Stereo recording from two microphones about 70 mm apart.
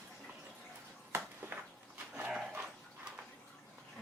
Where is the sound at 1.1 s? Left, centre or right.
Right.